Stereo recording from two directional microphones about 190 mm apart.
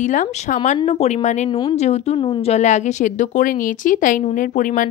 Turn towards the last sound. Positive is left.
turn(degrees=45)  # may be behind; listen again after turning